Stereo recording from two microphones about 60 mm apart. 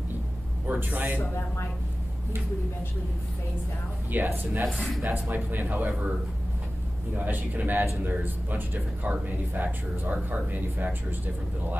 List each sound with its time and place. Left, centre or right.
0.7 s speech: right
4.1 s speech: right
4.6 s speech: centre
5.0 s speech: right
7.2 s speech: right